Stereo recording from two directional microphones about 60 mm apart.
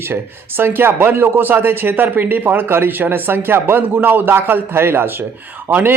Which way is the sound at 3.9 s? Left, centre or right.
Right.